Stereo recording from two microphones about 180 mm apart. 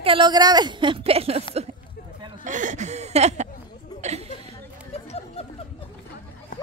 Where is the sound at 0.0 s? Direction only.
25° right (ahead or behind).